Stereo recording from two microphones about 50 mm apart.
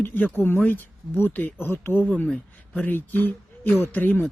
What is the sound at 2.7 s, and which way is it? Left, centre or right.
Speech, left.